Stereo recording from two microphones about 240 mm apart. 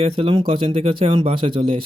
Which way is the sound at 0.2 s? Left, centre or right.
Right.